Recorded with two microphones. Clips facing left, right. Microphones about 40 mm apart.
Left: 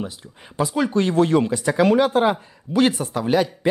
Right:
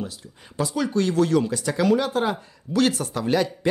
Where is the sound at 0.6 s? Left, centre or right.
Left.